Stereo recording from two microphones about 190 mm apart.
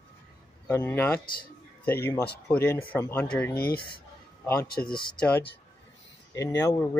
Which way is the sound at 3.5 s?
55° left (ahead or behind).